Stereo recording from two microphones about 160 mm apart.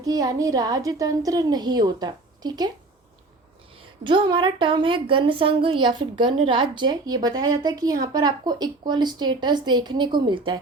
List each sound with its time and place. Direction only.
0.0 s a woman's voice: 25° right (ahead or behind)
4.0 s a woman's voice: 30° right (ahead or behind)